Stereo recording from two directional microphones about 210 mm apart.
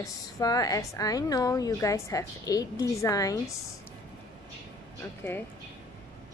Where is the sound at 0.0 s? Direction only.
15° left (ahead or behind).